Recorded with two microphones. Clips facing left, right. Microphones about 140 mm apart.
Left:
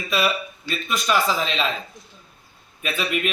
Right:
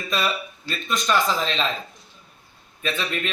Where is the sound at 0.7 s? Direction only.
5° left (ahead or behind).